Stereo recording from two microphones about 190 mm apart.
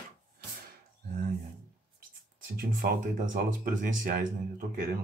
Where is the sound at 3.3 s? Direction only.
45° right (ahead or behind).